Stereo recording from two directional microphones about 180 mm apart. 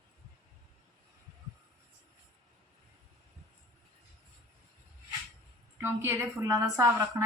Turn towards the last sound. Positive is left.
turn(degrees=-15)  # may be behind; listen again after turning